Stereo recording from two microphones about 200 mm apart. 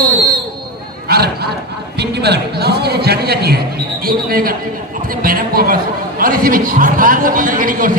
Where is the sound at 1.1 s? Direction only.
50° right (ahead or behind).